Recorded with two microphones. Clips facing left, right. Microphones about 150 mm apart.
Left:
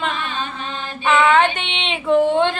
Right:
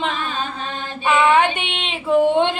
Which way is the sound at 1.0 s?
10° right (ahead or behind).